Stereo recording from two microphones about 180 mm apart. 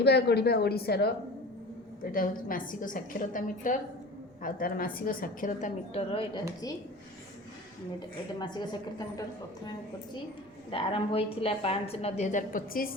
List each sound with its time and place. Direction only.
0.0 s speech: 65° left (ahead or behind)
2.1 s a woman's voice: 50° left (ahead or behind); by 6.4 s 30° left (ahead or behind)
7.9 s a woman's voice: 25° left (ahead or behind)
10.7 s a woman's voice: 30° left (ahead or behind); by 12.9 s 50° left (ahead or behind)